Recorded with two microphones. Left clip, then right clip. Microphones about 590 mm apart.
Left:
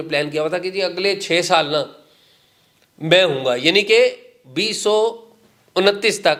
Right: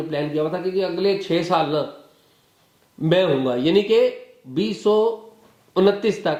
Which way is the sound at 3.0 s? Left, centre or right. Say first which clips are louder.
Left 4 dB; left.